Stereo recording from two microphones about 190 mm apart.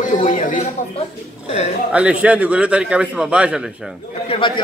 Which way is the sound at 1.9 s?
5° right (ahead or behind).